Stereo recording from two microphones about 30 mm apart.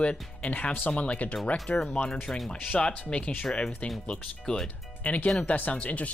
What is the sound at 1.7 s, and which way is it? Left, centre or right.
Speech, left.